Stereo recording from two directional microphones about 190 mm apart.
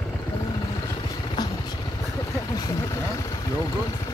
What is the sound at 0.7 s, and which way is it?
Vehicle, 20° left (ahead or behind).